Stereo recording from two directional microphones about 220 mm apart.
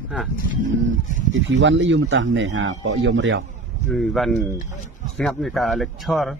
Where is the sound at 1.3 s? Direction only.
55° right (ahead or behind).